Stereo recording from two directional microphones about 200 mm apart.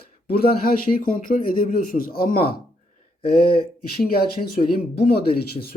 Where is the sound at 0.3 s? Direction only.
50° left (ahead or behind).